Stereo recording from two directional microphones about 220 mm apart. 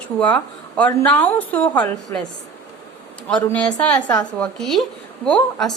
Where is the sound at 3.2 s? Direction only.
5° left (ahead or behind).